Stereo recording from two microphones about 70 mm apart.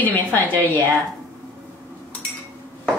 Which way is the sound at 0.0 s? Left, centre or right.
Left.